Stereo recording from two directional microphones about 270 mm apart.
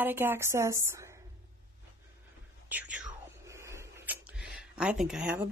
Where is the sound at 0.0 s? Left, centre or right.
Centre.